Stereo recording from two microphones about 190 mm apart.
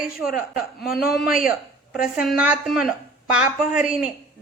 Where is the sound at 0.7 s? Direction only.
55° left (ahead or behind).